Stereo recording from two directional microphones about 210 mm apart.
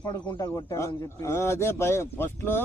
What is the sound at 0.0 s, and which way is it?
Speech, 20° left (ahead or behind).